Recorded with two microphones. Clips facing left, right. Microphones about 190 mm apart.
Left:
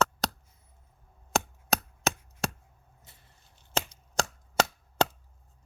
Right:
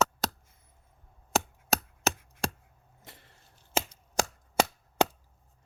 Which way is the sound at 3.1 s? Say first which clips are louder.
Right 10 dB; 90° right.